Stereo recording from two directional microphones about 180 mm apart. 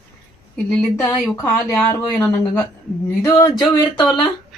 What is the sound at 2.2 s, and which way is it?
Speech, 15° left (ahead or behind).